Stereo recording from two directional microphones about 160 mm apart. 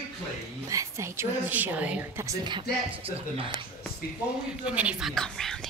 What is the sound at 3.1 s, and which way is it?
Speech, 35° right (ahead or behind).